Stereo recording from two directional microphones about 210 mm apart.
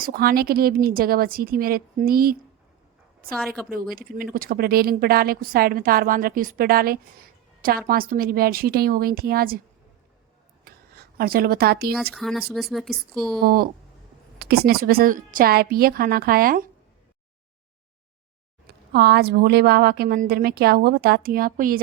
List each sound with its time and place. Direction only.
0.0 s a woman's voice: 45° right (ahead or behind)
3.3 s speech: 5° left (ahead or behind)
3.9 s a woman's voice: 45° right (ahead or behind)
10.7 s a sound: 45° right (ahead or behind)
12.1 s speech: centre (ahead or behind)
13.4 s a woman's voice: 45° right (ahead or behind)
18.9 s a woman's voice: 50° right (ahead or behind)